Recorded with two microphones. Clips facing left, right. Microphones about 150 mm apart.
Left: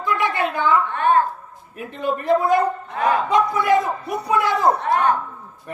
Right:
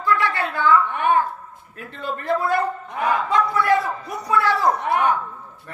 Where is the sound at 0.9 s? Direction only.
15° right (ahead or behind).